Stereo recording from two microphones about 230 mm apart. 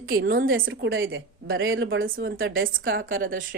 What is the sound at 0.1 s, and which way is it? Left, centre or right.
Speech, right.